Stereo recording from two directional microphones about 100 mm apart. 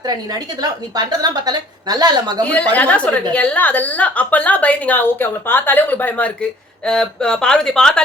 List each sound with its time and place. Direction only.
0.0 s a woman's voice: 40° right (ahead or behind)
2.5 s a woman's voice: 15° left (ahead or behind)